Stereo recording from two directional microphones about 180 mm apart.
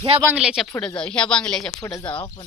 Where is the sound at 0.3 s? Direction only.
5° right (ahead or behind).